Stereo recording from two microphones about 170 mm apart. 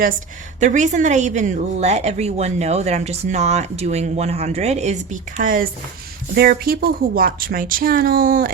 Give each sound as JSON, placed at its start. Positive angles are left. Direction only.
{"t": 0.6, "sound": "a woman's voice", "side_deg": -45}
{"t": 5.4, "sound": "speech", "side_deg": -55}